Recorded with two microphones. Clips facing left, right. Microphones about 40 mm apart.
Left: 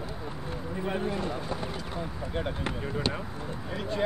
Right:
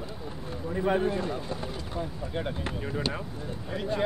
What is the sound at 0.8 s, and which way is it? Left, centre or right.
Speech, centre.